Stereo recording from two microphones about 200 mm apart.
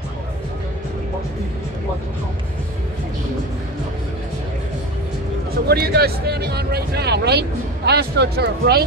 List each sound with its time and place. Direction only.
5.5 s speech: 55° right (ahead or behind)